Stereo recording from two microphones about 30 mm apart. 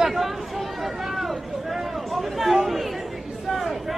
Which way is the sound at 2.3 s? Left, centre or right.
Centre.